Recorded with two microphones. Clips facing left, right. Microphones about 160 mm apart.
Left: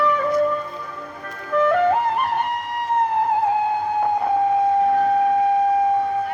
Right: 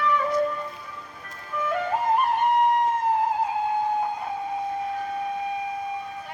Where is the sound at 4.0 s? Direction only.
65° left (ahead or behind).